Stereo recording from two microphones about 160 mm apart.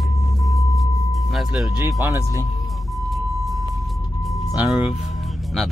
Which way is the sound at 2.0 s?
20° right (ahead or behind).